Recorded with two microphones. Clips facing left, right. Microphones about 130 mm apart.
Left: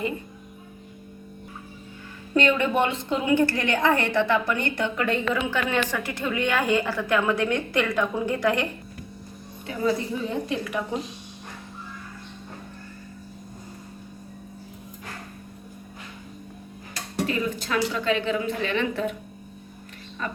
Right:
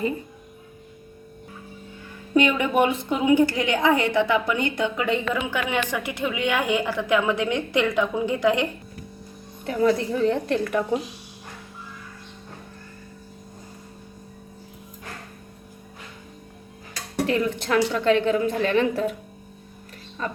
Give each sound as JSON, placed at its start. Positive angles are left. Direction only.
{"t": 2.3, "sound": "a woman's voice", "side_deg": -10}
{"t": 9.6, "sound": "a woman's voice", "side_deg": -70}
{"t": 17.2, "sound": "a woman's voice", "side_deg": -65}
{"t": 18.6, "sound": "a woman's voice", "side_deg": -45}